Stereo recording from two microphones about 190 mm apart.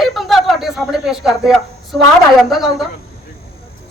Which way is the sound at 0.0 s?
Centre (ahead or behind).